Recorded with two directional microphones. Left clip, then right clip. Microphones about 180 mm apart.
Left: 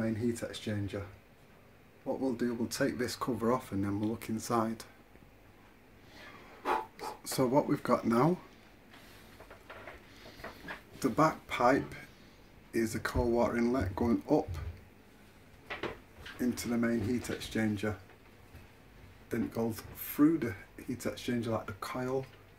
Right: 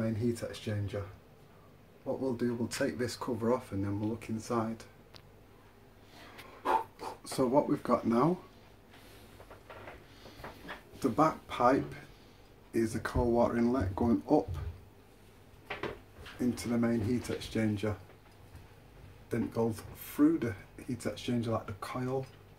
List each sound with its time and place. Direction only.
0.0 s speech: 20° left (ahead or behind)
2.0 s speech: 20° left (ahead or behind)
6.6 s speech: 15° left (ahead or behind)
11.0 s speech: 10° left (ahead or behind)
16.3 s speech: 5° left (ahead or behind)
19.2 s speech: 10° left (ahead or behind)